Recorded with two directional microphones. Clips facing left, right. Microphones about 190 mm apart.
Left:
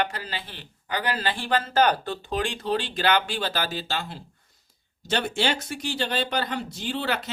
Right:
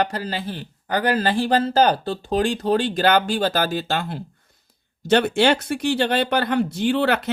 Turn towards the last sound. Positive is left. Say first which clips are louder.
# right 9 dB
turn(degrees=-60)  # may be behind; listen again after turning